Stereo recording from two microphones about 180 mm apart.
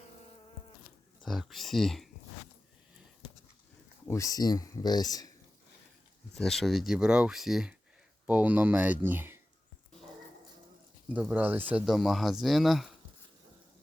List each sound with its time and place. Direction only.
1.2 s speech: centre (ahead or behind)
4.1 s speech: 20° left (ahead or behind)
6.3 s speech: centre (ahead or behind)
11.1 s speech: 10° right (ahead or behind)